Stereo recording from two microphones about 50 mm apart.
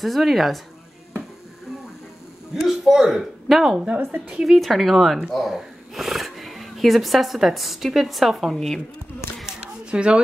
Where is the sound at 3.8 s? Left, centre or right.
Right.